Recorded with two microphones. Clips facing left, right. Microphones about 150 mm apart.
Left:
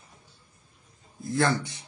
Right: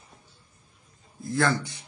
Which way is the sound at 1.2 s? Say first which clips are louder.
Even; 25° left (ahead or behind).